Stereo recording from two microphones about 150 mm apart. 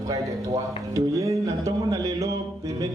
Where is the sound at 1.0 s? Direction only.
20° right (ahead or behind).